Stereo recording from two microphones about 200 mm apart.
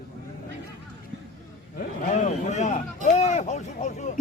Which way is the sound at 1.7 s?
40° left (ahead or behind).